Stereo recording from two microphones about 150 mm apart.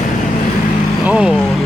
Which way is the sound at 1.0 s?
5° right (ahead or behind).